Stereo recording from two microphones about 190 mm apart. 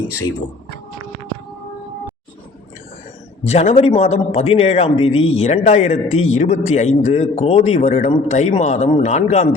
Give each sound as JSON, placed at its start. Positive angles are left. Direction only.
{"t": 3.4, "sound": "a man's voice", "side_deg": 35}